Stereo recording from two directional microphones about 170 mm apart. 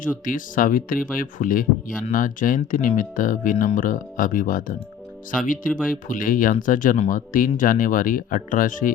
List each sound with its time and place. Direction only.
0.3 s speech: 55° left (ahead or behind)